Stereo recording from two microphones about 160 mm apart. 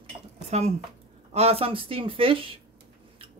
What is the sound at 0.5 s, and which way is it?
Speech, 45° right (ahead or behind).